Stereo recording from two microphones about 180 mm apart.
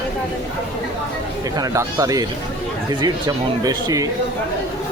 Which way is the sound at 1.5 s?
20° right (ahead or behind).